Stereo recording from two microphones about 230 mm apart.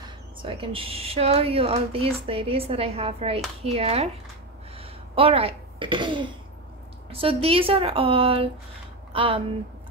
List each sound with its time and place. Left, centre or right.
0.0 s speech: right
4.7 s a sound: right
7.1 s speech: right